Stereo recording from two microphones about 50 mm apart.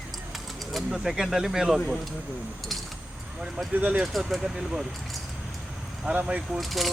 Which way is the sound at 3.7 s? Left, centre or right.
Right.